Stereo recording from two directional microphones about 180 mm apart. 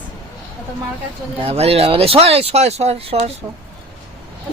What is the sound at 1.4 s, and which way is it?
Speech, 35° right (ahead or behind).